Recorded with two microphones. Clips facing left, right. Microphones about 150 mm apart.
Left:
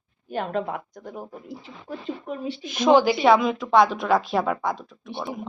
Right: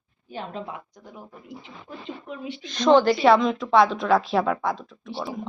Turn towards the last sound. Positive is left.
turn(degrees=0)  # may be behind; listen again after turning